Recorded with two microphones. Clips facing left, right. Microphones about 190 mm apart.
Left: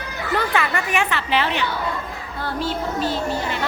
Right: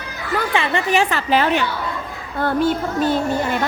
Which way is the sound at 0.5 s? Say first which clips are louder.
Right 4 dB; 25° right (ahead or behind).